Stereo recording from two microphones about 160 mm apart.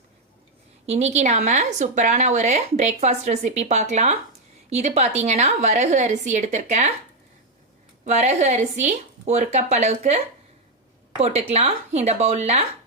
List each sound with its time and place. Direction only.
0.9 s a woman's voice: 45° right (ahead or behind)
8.0 s a woman's voice: 45° right (ahead or behind)
11.2 s a woman's voice: 40° right (ahead or behind)